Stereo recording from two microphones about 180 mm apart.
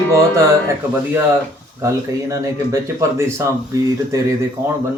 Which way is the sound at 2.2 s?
15° right (ahead or behind).